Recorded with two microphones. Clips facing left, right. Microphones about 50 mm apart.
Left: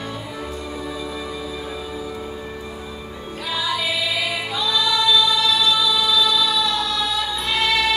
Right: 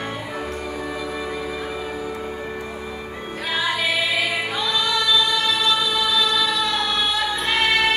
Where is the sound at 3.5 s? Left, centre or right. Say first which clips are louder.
Right 2 dB; right.